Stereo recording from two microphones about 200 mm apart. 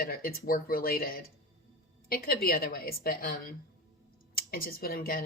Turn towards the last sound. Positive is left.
turn(degrees=45)  # may be behind; listen again after turning